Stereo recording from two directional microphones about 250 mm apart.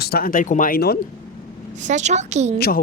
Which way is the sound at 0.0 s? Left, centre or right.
Left.